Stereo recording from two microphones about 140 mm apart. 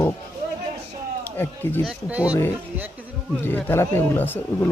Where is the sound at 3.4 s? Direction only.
15° left (ahead or behind).